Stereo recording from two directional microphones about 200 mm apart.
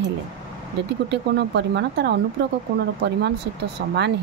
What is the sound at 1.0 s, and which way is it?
Speech, 60° right (ahead or behind).